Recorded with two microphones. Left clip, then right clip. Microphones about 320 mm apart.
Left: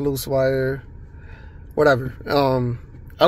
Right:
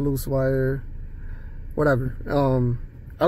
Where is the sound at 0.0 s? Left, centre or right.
Left.